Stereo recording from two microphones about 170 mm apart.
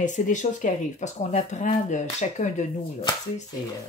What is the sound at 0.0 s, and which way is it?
Speech, 45° left (ahead or behind).